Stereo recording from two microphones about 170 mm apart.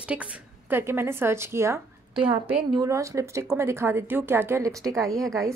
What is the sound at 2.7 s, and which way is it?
A woman's voice, 20° right (ahead or behind).